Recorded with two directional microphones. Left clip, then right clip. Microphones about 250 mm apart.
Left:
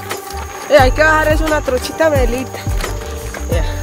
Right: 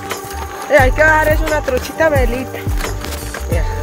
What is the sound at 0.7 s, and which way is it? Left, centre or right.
Speech, centre.